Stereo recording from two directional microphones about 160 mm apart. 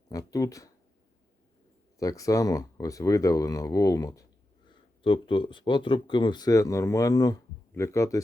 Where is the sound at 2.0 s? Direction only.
20° left (ahead or behind).